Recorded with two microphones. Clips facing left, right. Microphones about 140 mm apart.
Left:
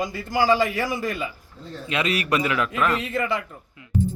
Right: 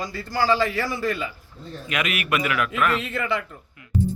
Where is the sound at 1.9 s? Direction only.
30° left (ahead or behind).